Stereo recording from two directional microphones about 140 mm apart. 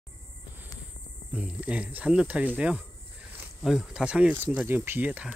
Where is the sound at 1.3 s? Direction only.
10° right (ahead or behind).